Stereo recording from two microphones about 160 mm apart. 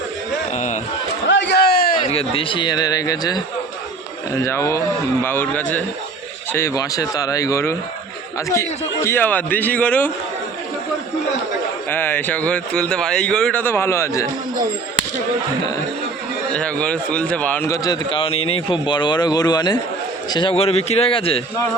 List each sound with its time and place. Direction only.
0.5 s a sound: 50° left (ahead or behind)
1.4 s a sound: 90° left; by 2.0 s 70° left (ahead or behind)
2.0 s speech: 35° left (ahead or behind); by 10.1 s 10° left (ahead or behind)
11.9 s speech: 10° left (ahead or behind)
16.5 s speech: 5° left (ahead or behind)
17.7 s a man's voice: 25° left (ahead or behind)